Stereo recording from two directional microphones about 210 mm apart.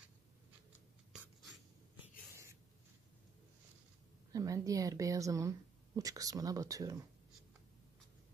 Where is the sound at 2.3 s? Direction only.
15° right (ahead or behind).